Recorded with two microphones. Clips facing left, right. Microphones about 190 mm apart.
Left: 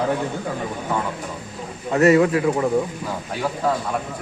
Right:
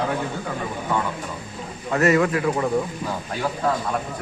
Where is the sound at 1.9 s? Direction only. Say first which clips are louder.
Left 4 dB; 25° left (ahead or behind).